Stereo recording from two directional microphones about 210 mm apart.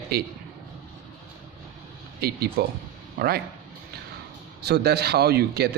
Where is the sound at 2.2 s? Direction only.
50° right (ahead or behind).